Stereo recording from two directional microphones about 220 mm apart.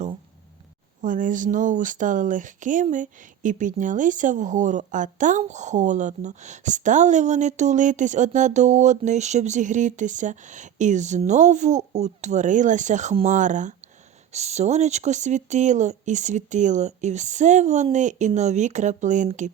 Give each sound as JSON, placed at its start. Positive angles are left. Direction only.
{"t": 1.0, "sound": "speech", "side_deg": -35}